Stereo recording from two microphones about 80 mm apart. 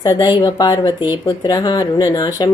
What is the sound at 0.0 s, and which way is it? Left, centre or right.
Speech, left.